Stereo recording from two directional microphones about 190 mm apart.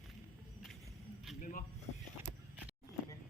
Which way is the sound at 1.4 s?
45° left (ahead or behind).